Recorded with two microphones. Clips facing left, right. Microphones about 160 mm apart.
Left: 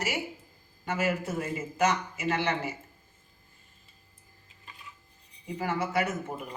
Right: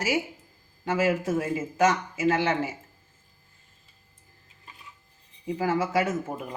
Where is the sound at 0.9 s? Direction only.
90° right.